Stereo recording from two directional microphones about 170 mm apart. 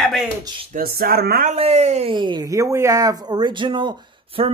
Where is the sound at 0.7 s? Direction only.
60° right (ahead or behind).